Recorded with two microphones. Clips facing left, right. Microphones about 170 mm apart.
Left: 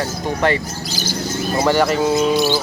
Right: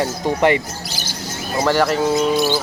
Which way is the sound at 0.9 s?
65° right (ahead or behind).